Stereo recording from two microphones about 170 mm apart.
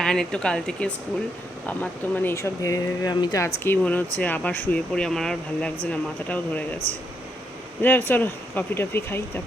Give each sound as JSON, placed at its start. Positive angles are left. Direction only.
{"t": 0.0, "sound": "speech", "side_deg": 5}
{"t": 3.6, "sound": "speech", "side_deg": 10}
{"t": 7.8, "sound": "speech", "side_deg": 10}